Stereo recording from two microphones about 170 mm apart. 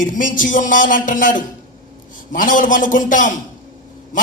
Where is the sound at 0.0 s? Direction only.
50° left (ahead or behind).